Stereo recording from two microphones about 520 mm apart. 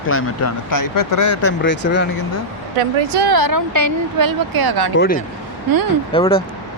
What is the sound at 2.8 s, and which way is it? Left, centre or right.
Speech, right.